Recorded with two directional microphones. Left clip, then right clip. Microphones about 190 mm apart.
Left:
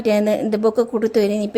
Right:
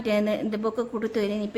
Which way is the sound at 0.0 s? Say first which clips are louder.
Left 7 dB; 25° left (ahead or behind).